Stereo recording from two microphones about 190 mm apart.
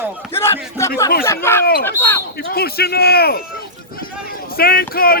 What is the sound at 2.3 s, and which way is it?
Speech, 55° left (ahead or behind).